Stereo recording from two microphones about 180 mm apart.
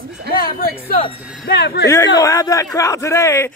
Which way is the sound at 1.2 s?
5° right (ahead or behind).